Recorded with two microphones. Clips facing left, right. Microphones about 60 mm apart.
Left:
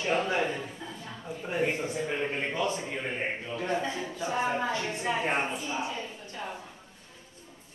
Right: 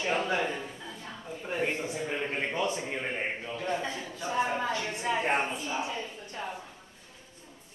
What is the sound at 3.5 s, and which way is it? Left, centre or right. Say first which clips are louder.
Speech: left 3 dB; left.